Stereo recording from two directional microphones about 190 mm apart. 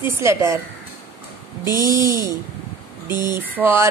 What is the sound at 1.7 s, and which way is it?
Speech, 15° right (ahead or behind).